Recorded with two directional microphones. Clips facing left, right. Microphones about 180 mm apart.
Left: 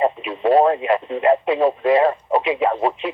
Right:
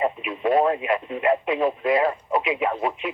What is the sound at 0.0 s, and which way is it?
Speech, 30° left (ahead or behind).